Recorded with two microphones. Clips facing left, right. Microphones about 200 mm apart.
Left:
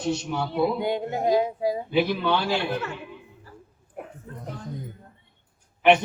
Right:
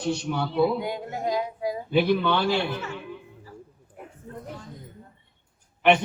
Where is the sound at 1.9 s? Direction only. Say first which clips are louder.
Right 4 dB; 55° right (ahead or behind).